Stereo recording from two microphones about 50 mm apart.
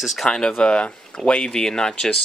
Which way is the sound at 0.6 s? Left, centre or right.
Left.